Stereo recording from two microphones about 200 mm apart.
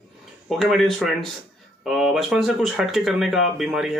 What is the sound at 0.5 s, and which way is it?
Speech, centre (ahead or behind).